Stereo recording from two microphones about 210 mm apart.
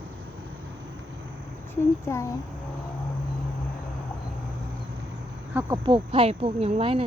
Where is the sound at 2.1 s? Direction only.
10° left (ahead or behind).